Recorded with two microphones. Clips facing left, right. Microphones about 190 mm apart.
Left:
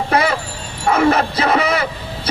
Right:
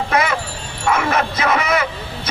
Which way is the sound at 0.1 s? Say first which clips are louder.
Left 2 dB; 35° left (ahead or behind).